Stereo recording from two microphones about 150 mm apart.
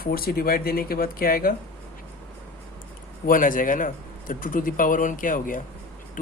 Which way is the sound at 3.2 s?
65° left (ahead or behind).